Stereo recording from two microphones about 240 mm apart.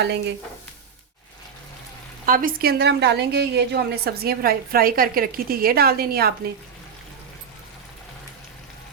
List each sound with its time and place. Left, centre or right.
0.0 s speech: right
2.2 s a woman's voice: right